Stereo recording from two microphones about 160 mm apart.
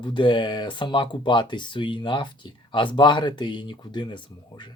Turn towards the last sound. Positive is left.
turn(degrees=30)  # may be behind; listen again after turning